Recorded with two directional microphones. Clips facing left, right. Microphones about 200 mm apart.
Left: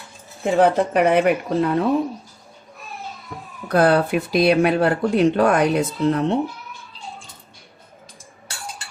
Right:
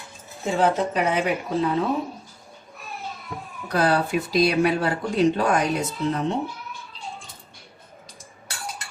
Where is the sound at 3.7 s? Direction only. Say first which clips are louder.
Left 5 dB; 55° left (ahead or behind).